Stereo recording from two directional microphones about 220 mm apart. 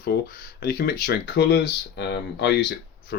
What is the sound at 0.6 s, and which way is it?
Speech, 45° left (ahead or behind).